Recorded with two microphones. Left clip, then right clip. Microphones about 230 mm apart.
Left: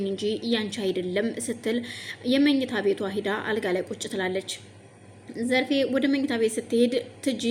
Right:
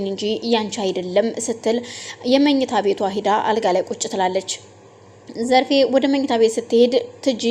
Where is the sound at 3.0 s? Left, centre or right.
Right.